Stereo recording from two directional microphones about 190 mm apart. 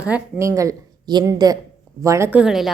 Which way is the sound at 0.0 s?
10° right (ahead or behind).